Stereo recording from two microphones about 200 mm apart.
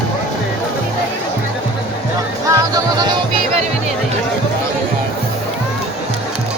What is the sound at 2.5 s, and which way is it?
Music, 20° right (ahead or behind).